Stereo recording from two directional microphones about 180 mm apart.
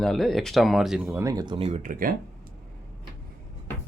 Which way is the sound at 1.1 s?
20° right (ahead or behind).